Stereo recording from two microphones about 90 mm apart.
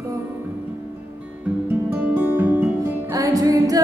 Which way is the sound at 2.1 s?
20° right (ahead or behind).